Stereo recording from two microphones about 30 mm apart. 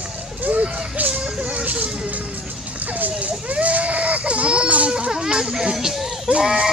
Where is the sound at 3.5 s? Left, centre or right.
Right.